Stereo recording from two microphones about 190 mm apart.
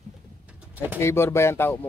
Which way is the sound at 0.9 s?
15° left (ahead or behind).